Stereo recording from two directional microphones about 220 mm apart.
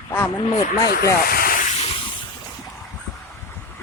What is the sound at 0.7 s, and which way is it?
Speech, 45° left (ahead or behind).